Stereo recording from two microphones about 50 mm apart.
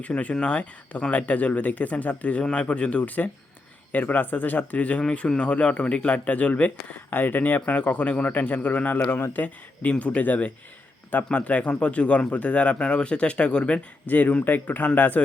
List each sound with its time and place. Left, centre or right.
0.0 s speech: left
14.1 s speech: left